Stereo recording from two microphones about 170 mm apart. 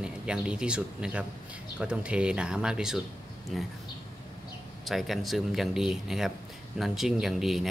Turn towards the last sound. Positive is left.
turn(degrees=0)  # may be behind; listen again after turning